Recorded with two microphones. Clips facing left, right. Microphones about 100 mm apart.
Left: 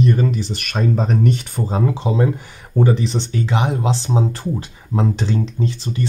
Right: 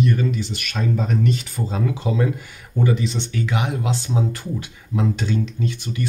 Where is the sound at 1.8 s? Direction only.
30° left (ahead or behind).